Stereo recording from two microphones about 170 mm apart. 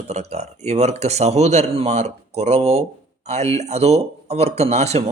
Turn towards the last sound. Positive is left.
turn(degrees=-40)  # may be behind; listen again after turning